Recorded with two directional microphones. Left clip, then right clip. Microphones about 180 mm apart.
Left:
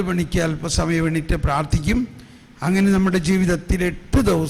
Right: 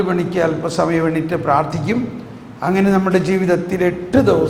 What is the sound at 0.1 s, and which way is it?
A man's voice, 35° left (ahead or behind).